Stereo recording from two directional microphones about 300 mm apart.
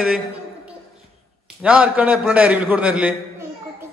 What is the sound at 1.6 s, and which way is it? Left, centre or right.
A man's voice, centre.